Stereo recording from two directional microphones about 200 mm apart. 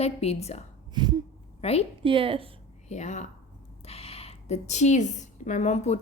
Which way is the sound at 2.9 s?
35° left (ahead or behind).